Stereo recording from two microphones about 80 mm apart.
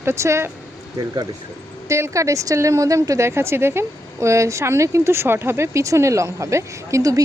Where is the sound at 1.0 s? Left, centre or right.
Right.